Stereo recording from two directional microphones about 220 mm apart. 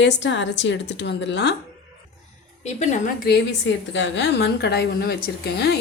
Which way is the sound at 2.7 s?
30° left (ahead or behind).